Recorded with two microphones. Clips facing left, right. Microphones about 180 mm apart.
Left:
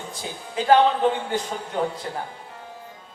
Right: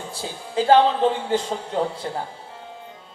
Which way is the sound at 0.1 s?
30° right (ahead or behind).